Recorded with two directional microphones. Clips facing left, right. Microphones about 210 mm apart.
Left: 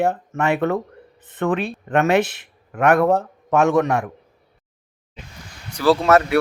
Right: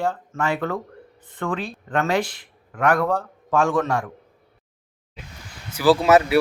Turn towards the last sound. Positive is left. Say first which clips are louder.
# even
turn(degrees=-5)  # may be behind; listen again after turning